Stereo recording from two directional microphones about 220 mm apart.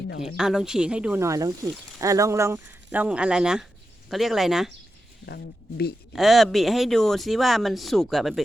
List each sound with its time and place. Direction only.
0.2 s speech: 5° right (ahead or behind)
5.2 s speech: 50° left (ahead or behind)
6.1 s speech: centre (ahead or behind)